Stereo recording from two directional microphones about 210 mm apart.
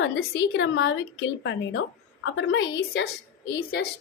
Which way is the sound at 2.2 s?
60° left (ahead or behind).